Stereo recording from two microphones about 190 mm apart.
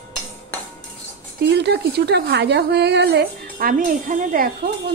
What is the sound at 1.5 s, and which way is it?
A woman's voice, 60° right (ahead or behind).